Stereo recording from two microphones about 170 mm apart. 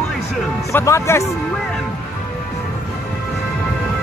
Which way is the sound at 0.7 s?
15° left (ahead or behind).